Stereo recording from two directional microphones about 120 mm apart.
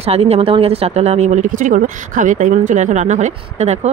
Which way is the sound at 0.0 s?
60° right (ahead or behind).